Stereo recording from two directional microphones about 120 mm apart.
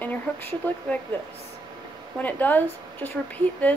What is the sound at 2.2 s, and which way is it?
Speech, 15° left (ahead or behind).